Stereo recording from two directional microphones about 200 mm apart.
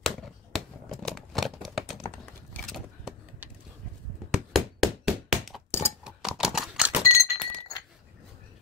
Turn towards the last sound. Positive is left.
turn(degrees=15)  # may be behind; listen again after turning